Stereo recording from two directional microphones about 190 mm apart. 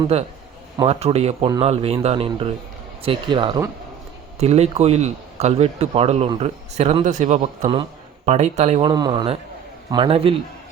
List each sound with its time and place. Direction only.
0.1 s a man's voice: 30° right (ahead or behind)